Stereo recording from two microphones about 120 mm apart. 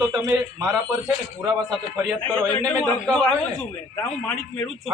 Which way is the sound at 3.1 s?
10° left (ahead or behind).